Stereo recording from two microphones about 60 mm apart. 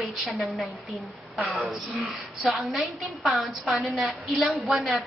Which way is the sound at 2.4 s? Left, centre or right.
Centre.